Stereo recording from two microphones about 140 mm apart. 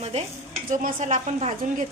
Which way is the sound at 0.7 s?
70° right (ahead or behind).